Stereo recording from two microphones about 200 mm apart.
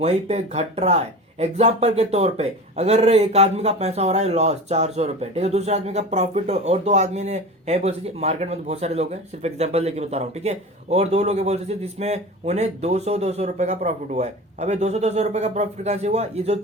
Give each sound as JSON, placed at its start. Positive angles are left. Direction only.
{"t": 0.0, "sound": "speech", "side_deg": -35}